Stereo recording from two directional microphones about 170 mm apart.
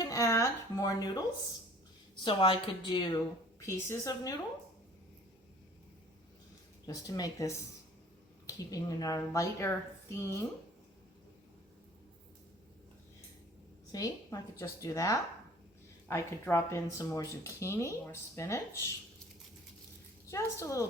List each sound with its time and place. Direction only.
0.0 s a sound: 20° left (ahead or behind)
2.2 s a woman's voice: 30° left (ahead or behind)
6.8 s a woman's voice: 20° left (ahead or behind)
13.9 s a woman's voice: 20° left (ahead or behind)
20.2 s speech: 15° left (ahead or behind)